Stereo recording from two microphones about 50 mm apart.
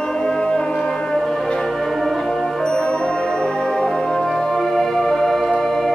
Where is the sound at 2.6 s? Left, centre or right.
Centre.